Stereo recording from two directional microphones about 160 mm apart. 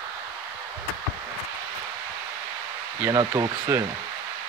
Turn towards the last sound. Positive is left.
turn(degrees=-20)  # may be behind; listen again after turning